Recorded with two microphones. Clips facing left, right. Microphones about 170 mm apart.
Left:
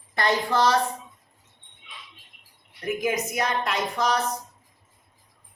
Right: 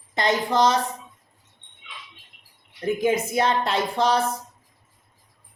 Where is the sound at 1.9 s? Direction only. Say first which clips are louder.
Right 3 dB; 90° right.